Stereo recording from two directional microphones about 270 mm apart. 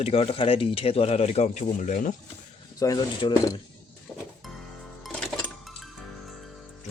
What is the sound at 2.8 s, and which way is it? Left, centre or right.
Speech, centre.